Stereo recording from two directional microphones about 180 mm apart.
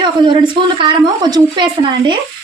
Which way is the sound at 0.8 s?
25° right (ahead or behind).